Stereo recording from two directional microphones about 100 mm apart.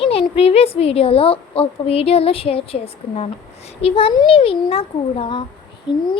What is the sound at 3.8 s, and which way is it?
A woman's voice, 70° left (ahead or behind).